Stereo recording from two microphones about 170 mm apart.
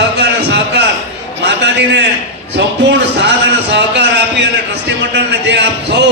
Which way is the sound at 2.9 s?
90° right.